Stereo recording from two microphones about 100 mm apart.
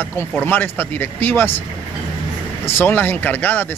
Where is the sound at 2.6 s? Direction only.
20° left (ahead or behind).